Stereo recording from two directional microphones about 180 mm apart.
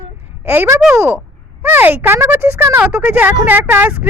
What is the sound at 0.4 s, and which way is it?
Speech, 10° right (ahead or behind).